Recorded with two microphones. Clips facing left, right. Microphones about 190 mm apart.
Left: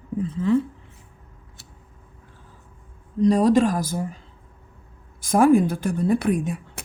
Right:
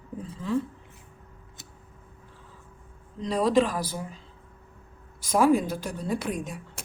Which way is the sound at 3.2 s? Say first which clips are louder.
Left 6 dB; 45° left (ahead or behind).